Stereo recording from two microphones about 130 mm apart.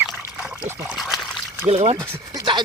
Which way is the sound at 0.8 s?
Centre (ahead or behind).